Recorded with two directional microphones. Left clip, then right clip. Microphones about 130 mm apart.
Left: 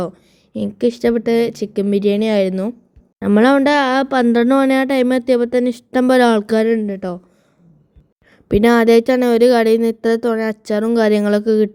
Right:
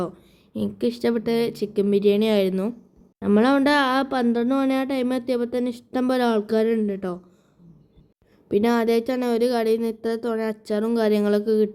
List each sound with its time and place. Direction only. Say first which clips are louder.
0.5 s speech: left 7 dB; 40° left (ahead or behind)
6.7 s speech: left 4 dB; 40° left (ahead or behind)
8.4 s speech: left 9 dB; 55° left (ahead or behind)